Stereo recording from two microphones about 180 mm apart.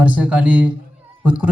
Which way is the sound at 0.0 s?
10° right (ahead or behind).